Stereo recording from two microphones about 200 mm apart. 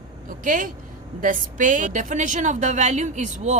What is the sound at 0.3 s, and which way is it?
A woman's voice, 40° right (ahead or behind).